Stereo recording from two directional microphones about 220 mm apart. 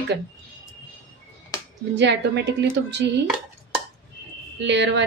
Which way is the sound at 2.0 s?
50° right (ahead or behind).